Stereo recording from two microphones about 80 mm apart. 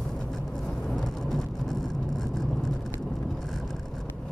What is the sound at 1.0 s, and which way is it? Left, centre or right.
Vehicle, centre.